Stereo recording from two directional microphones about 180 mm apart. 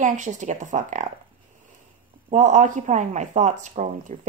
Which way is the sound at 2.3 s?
45° right (ahead or behind).